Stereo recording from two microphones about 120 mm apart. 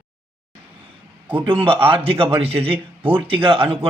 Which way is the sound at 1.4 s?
45° right (ahead or behind).